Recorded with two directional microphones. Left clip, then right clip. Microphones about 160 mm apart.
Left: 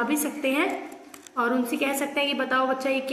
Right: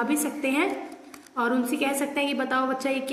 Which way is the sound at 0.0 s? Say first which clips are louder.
Left 1 dB; 30° right (ahead or behind).